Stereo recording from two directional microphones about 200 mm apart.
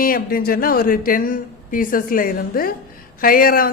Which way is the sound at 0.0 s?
45° left (ahead or behind).